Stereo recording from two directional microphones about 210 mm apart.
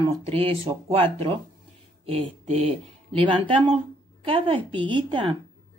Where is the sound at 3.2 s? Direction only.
25° right (ahead or behind).